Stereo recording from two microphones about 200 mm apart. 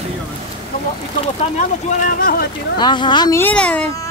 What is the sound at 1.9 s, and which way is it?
Speech, 40° left (ahead or behind).